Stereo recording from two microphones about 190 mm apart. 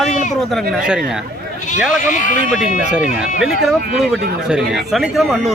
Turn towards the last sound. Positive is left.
turn(degrees=0)  # may be behind; listen again after turning